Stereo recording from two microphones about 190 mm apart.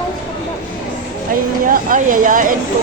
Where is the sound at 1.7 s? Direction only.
45° right (ahead or behind).